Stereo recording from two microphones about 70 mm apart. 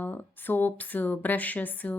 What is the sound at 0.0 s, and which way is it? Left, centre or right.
Speech, left.